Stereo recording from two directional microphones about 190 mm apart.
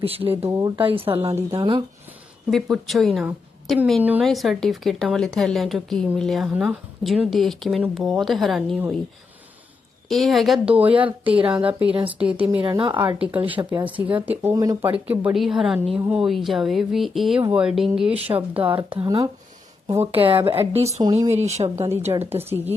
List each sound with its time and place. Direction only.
0.0 s speech: 30° right (ahead or behind)
0.3 s a woman's voice: 10° right (ahead or behind)
0.8 s speech: 30° right (ahead or behind)
2.5 s speech: centre (ahead or behind)
10.1 s a woman's voice: centre (ahead or behind)
12.6 s speech: 25° right (ahead or behind)
13.1 s a woman's voice: 5° right (ahead or behind)
18.8 s speech: 25° right (ahead or behind)
22.4 s a woman's voice: 10° right (ahead or behind)